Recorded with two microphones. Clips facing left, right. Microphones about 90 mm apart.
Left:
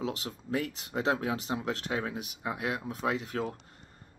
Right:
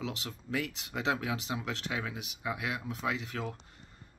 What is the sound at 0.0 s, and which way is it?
Speech, 40° left (ahead or behind).